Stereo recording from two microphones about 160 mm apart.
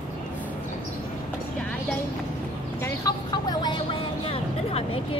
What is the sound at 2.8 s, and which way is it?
Vehicle, 25° left (ahead or behind).